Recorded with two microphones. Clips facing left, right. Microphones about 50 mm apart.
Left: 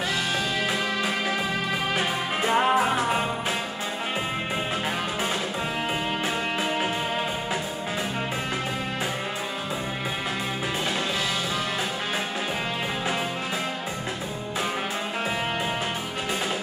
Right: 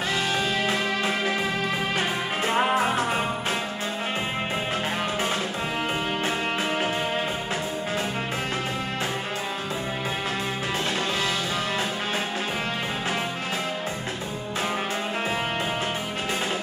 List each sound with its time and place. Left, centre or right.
2.0 s music: centre